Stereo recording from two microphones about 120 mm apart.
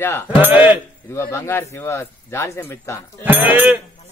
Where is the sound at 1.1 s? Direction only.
25° left (ahead or behind).